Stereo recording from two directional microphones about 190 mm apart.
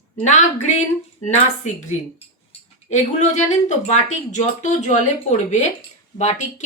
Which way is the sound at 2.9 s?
40° left (ahead or behind).